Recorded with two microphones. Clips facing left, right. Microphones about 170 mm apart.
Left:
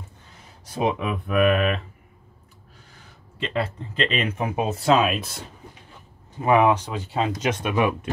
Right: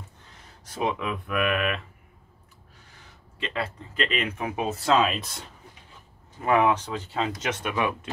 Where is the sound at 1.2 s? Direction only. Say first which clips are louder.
Left 7 dB; 30° left (ahead or behind).